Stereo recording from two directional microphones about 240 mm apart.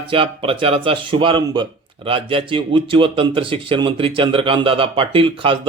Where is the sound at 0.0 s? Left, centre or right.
Right.